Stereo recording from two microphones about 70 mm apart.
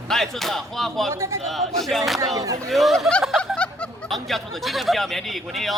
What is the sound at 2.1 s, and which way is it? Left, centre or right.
Speech, right.